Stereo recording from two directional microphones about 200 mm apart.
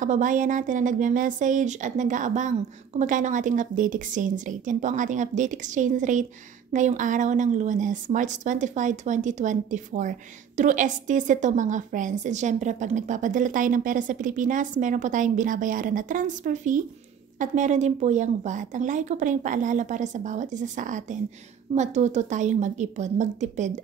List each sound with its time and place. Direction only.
0.0 s a woman's voice: 40° right (ahead or behind)